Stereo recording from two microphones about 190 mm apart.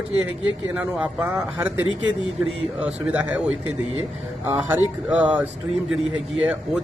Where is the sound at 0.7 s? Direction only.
5° right (ahead or behind).